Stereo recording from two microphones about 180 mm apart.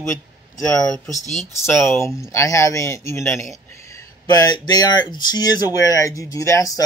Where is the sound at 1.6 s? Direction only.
15° left (ahead or behind).